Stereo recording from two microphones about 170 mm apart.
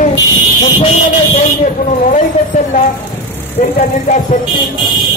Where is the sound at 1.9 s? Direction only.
45° left (ahead or behind).